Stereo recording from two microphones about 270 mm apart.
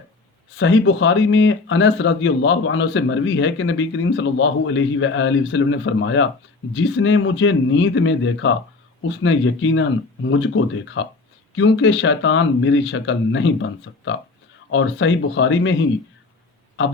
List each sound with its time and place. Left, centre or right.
0.5 s speech: left